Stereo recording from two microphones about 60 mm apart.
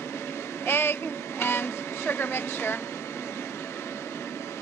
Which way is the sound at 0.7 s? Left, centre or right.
Left.